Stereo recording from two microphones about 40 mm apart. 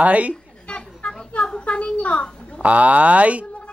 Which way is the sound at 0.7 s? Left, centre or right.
Left.